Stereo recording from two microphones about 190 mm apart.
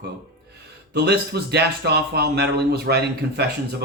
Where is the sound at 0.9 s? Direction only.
60° right (ahead or behind).